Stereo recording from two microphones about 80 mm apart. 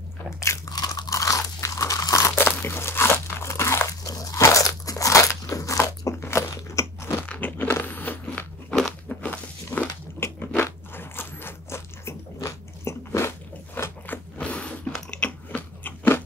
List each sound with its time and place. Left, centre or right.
0.7 s crunch: left
2.3 s crunch: left
6.5 s biting: left
7.2 s biting: left
8.6 s crunch: centre
9.2 s a sound: centre
10.2 s crunch: left
12.4 s biting: left
14.4 s a sound: centre
15.0 s biting: centre